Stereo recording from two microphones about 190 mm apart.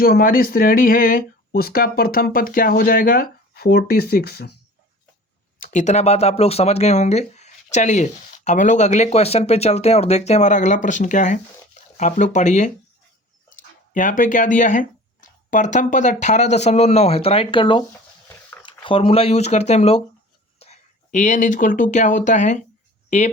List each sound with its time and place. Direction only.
0.0 s speech: 50° left (ahead or behind)
5.5 s speech: 40° left (ahead or behind)